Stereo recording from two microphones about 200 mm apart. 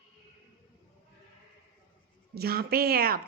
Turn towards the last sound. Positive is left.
turn(degrees=-50)  # may be behind; listen again after turning